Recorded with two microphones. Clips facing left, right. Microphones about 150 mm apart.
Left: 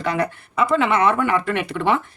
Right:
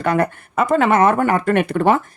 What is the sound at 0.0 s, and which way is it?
Speech, 50° right (ahead or behind).